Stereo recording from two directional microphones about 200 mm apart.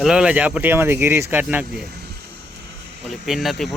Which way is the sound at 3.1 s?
Centre (ahead or behind).